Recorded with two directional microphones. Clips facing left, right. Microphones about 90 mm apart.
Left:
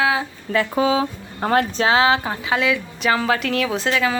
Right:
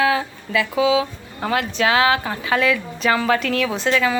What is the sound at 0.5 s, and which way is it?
Speech, 40° left (ahead or behind).